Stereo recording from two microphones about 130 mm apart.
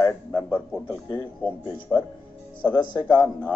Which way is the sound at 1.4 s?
10° right (ahead or behind).